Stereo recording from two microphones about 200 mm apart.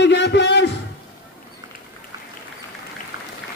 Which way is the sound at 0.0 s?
60° left (ahead or behind).